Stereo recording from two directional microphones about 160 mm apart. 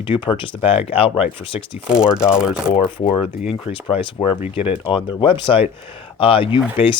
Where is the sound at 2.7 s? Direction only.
35° left (ahead or behind).